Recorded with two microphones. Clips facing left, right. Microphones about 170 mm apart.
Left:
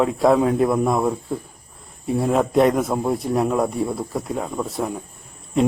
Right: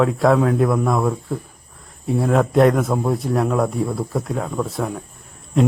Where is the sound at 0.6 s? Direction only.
20° left (ahead or behind).